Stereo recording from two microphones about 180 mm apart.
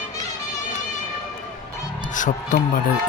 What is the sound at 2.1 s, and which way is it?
Speech, 45° left (ahead or behind).